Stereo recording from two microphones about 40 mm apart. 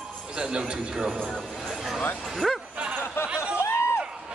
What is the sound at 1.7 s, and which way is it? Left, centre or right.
Vehicle, centre.